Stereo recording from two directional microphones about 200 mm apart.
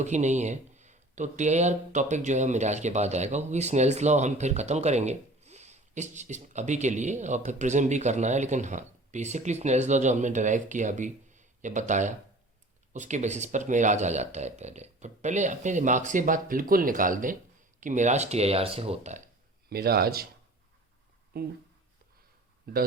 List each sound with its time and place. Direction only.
0.0 s speech: 35° right (ahead or behind)
19.7 s speech: 50° right (ahead or behind)
21.3 s speech: 50° right (ahead or behind)